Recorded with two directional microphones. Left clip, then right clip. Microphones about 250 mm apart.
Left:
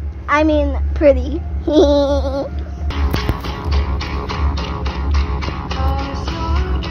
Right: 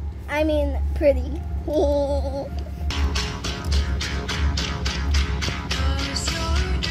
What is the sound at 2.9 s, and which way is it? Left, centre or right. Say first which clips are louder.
Music: left 5 dB; right.